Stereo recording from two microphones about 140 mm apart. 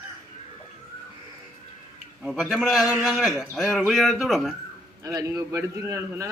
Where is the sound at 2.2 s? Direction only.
Centre (ahead or behind).